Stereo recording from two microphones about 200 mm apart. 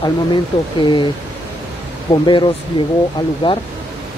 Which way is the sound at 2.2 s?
20° left (ahead or behind).